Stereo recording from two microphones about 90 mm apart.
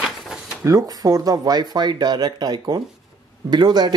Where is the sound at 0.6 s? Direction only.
45° right (ahead or behind).